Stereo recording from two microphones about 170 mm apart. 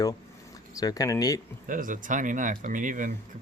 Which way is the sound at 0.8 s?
20° left (ahead or behind).